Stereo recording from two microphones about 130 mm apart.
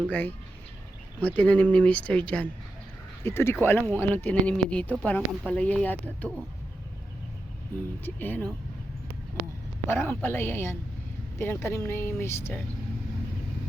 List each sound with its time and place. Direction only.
0.1 s speech: 15° left (ahead or behind)
1.4 s speech: 10° left (ahead or behind)
8.0 s speech: 15° left (ahead or behind)
9.8 s a man's voice: 20° left (ahead or behind)